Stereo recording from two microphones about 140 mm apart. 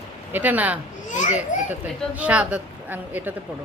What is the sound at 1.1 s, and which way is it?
Children playing, 60° left (ahead or behind).